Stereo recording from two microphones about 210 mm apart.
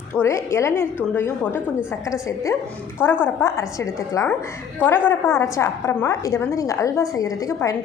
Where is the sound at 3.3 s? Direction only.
10° left (ahead or behind).